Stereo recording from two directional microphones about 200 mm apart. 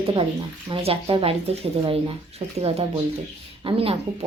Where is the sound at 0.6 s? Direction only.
30° right (ahead or behind).